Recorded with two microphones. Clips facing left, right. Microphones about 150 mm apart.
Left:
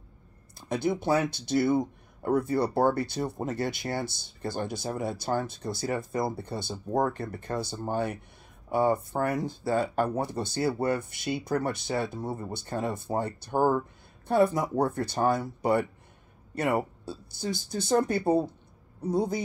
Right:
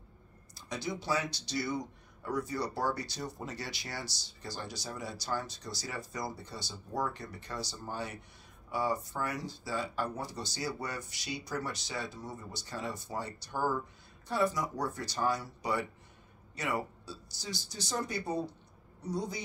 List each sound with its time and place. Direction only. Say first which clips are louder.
0.6 s speech: left 10 dB; 55° left (ahead or behind)